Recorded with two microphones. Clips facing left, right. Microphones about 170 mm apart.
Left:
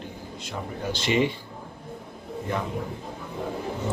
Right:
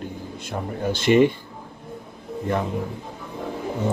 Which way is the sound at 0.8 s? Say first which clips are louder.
Right 7 dB; 50° right (ahead or behind).